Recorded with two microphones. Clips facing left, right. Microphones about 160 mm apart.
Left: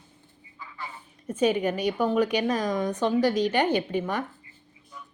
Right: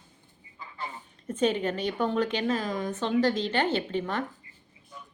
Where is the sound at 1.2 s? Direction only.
10° left (ahead or behind).